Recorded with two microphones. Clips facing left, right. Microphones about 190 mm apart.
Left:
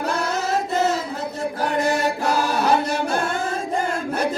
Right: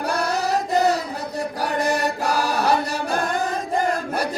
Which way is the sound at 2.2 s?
10° right (ahead or behind).